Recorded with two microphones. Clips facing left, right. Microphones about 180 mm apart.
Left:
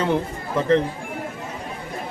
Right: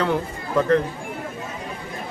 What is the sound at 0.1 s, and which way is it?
Speech, 20° left (ahead or behind).